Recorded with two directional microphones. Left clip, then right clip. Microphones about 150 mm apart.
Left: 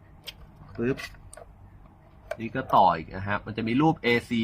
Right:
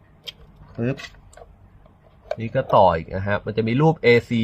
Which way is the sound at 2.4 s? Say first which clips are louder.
Right 5 dB; 85° right.